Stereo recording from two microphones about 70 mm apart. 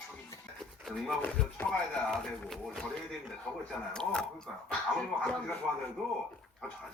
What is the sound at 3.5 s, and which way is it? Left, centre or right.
Speech, centre.